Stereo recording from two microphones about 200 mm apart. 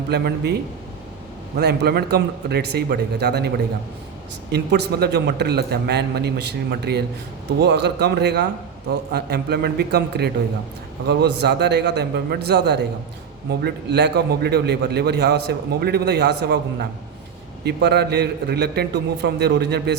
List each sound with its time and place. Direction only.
0.1 s a man's voice: 55° right (ahead or behind)
1.5 s a man's voice: 55° right (ahead or behind)
4.5 s a man's voice: 55° right (ahead or behind)
17.7 s a man's voice: 55° right (ahead or behind)